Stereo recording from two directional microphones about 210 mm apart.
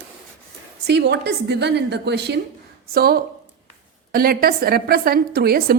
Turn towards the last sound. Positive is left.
turn(degrees=-45)  # may be behind; listen again after turning